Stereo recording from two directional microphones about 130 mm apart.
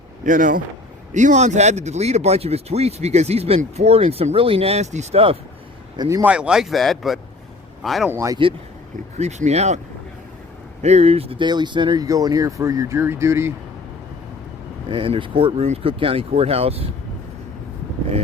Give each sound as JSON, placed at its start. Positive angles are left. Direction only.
{"t": 0.3, "sound": "speech", "side_deg": -90}
{"t": 1.1, "sound": "speech", "side_deg": -65}
{"t": 6.0, "sound": "speech", "side_deg": -30}
{"t": 6.2, "sound": "speech", "side_deg": -10}
{"t": 8.0, "sound": "speech", "side_deg": -20}
{"t": 9.1, "sound": "speech", "side_deg": -60}
{"t": 10.8, "sound": "speech", "side_deg": -55}
{"t": 14.8, "sound": "speech", "side_deg": -40}